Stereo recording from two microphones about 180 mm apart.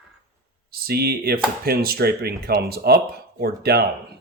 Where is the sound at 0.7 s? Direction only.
60° right (ahead or behind).